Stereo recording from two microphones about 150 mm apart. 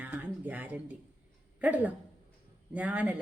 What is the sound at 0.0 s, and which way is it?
Speech, 10° right (ahead or behind).